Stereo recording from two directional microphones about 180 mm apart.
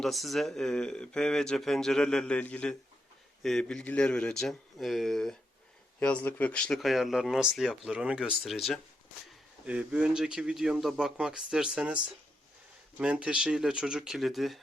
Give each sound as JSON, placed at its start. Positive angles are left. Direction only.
{"t": 0.0, "sound": "speech", "side_deg": 0}
{"t": 13.0, "sound": "speech", "side_deg": -5}